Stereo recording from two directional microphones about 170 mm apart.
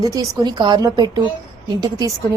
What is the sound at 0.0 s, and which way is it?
A woman's voice, 20° right (ahead or behind).